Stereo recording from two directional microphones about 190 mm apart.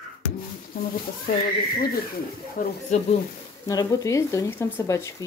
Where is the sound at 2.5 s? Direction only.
50° left (ahead or behind).